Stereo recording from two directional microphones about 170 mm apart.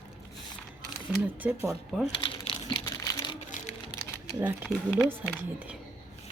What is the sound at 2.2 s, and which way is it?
Crumpling, 30° left (ahead or behind).